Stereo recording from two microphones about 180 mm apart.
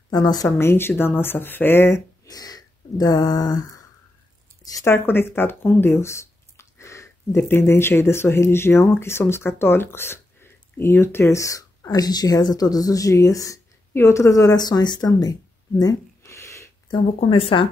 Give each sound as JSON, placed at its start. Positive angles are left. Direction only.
{"t": 0.1, "sound": "speech", "side_deg": 20}
{"t": 4.6, "sound": "speech", "side_deg": 15}
{"t": 15.8, "sound": "a sound", "side_deg": 20}
{"t": 17.2, "sound": "speech", "side_deg": 30}